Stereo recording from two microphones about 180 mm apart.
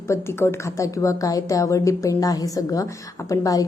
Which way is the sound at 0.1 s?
15° left (ahead or behind).